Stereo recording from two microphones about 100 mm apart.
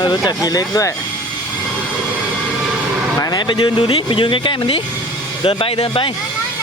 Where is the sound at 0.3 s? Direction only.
40° left (ahead or behind).